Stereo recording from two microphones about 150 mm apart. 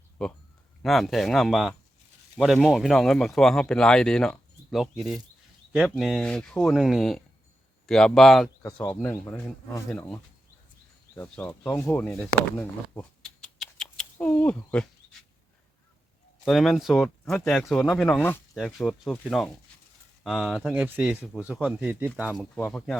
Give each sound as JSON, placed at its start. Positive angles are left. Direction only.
{"t": 0.8, "sound": "speech", "side_deg": 0}
{"t": 8.8, "sound": "speech", "side_deg": 10}
{"t": 13.6, "sound": "a sound", "side_deg": 5}
{"t": 16.4, "sound": "speech", "side_deg": 0}
{"t": 20.7, "sound": "speech", "side_deg": -10}
{"t": 22.5, "sound": "speech", "side_deg": 5}